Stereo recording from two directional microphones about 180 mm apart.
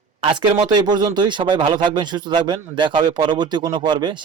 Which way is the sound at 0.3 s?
25° right (ahead or behind).